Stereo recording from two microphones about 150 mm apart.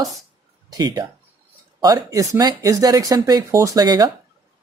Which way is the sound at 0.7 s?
25° right (ahead or behind).